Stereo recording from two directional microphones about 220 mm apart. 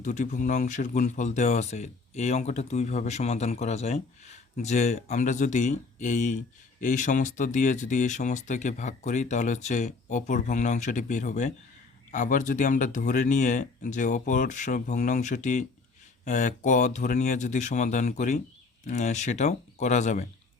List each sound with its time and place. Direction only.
0.0 s speech: 35° left (ahead or behind)